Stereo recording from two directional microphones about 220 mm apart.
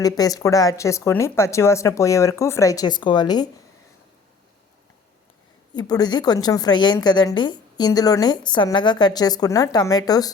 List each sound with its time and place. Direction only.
0.0 s a woman's voice: 15° left (ahead or behind)
5.7 s a woman's voice: 20° left (ahead or behind)